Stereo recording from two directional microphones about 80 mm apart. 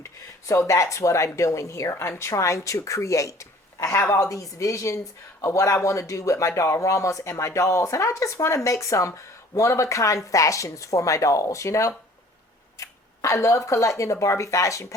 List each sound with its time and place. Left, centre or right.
0.0 s speech: left